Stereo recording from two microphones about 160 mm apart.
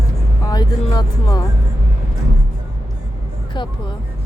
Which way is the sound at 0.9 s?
20° left (ahead or behind).